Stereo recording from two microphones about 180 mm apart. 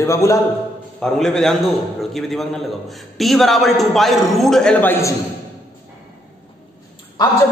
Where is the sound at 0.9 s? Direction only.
Centre (ahead or behind).